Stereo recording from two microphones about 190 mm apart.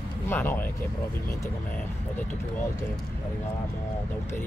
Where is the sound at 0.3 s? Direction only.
10° left (ahead or behind).